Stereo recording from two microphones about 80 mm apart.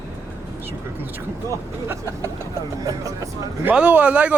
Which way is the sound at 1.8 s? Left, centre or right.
Right.